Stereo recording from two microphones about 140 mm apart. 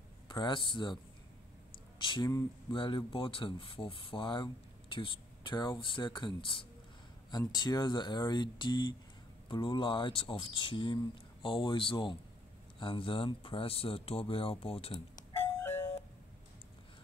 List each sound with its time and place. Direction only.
0.3 s speech: 35° left (ahead or behind)
2.0 s speech: 35° left (ahead or behind)